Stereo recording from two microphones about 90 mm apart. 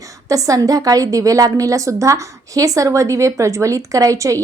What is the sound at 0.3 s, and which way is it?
A woman's voice, 40° right (ahead or behind).